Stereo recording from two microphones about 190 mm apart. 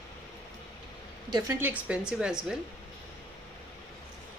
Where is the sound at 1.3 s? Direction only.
20° right (ahead or behind); by 2.6 s 5° right (ahead or behind).